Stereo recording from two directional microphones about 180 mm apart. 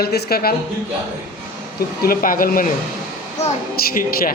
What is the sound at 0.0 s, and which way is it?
Speech, 60° left (ahead or behind).